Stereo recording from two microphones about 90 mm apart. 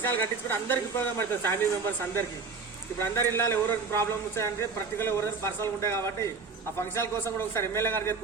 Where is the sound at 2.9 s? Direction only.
25° left (ahead or behind).